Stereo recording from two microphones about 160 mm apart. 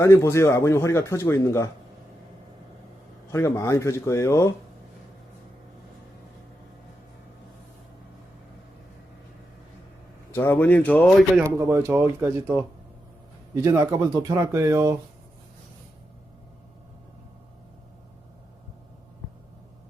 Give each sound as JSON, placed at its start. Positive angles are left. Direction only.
{"t": 0.0, "sound": "a man's voice", "side_deg": 20}
{"t": 3.3, "sound": "a man's voice", "side_deg": 20}
{"t": 10.3, "sound": "a man's voice", "side_deg": 15}
{"t": 11.5, "sound": "speech", "side_deg": -15}